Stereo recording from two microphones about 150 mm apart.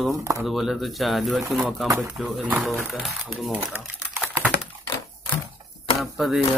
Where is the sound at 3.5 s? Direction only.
15° right (ahead or behind).